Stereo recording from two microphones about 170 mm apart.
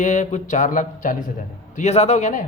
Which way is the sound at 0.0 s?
45° left (ahead or behind).